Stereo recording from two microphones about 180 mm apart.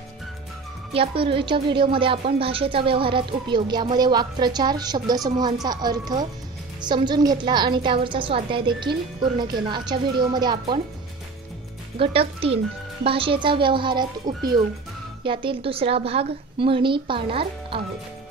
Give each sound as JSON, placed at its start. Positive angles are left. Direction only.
{"t": 0.9, "sound": "a woman's voice", "side_deg": -30}
{"t": 12.0, "sound": "a woman's voice", "side_deg": -30}